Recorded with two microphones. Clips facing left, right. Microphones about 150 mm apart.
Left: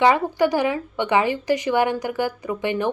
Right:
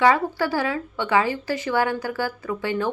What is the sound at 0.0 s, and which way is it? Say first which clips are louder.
A woman's voice: left 2 dB; 20° left (ahead or behind).